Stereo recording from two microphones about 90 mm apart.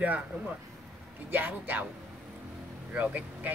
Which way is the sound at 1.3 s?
20° right (ahead or behind).